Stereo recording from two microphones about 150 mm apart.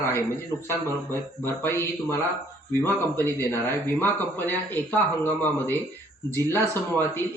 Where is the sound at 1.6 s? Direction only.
15° left (ahead or behind).